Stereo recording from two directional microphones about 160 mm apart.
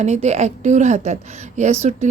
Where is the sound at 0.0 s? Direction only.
45° right (ahead or behind).